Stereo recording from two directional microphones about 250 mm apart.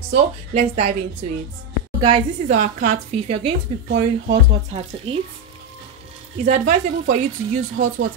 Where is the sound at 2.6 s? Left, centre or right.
Right.